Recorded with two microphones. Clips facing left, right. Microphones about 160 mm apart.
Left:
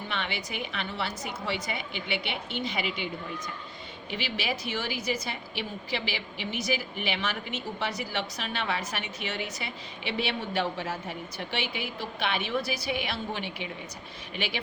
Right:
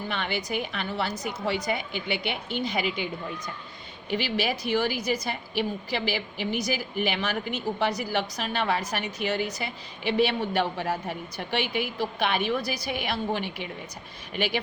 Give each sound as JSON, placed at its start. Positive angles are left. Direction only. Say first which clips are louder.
{"t": 0.1, "sound": "a woman's voice", "louder": "right 5 dB", "side_deg": -45}